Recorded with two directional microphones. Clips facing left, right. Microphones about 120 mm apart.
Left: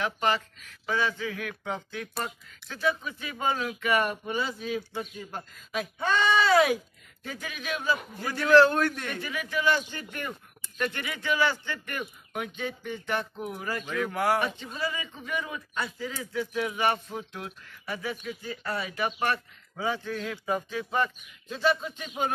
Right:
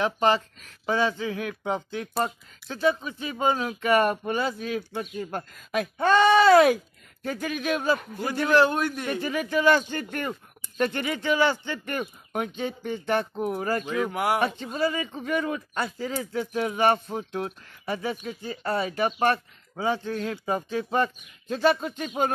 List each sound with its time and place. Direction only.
0.0 s speech: 30° right (ahead or behind)
3.9 s a man's voice: 50° right (ahead or behind)
8.3 s a man's voice: 20° right (ahead or behind)
9.2 s a man's voice: 35° right (ahead or behind)
9.8 s a man's voice: 50° right (ahead or behind)
10.8 s speech: 35° right (ahead or behind)
12.0 s a man's voice: 40° right (ahead or behind)
13.9 s speech: 20° right (ahead or behind)
14.4 s a man's voice: 45° right (ahead or behind)
21.5 s a man's voice: 55° right (ahead or behind)